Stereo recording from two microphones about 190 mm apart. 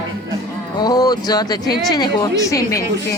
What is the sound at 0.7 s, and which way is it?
A woman's voice, 20° left (ahead or behind).